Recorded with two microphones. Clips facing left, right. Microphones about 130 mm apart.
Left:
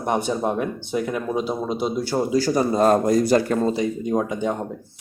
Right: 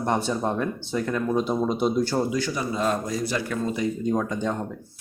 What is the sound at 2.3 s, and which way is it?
Speech, 40° left (ahead or behind).